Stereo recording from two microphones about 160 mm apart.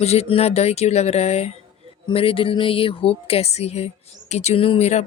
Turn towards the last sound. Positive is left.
turn(degrees=45)  # may be behind; listen again after turning